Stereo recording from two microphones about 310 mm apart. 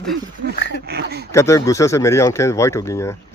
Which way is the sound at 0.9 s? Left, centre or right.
Right.